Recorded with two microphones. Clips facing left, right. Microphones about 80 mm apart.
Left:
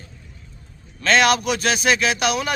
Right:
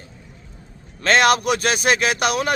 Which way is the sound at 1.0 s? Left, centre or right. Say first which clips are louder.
Right 1 dB; right.